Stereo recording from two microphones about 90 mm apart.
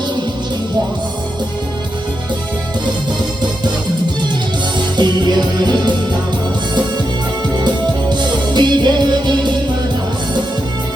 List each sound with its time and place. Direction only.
4.9 s music: 55° right (ahead or behind)
8.1 s music: 55° right (ahead or behind)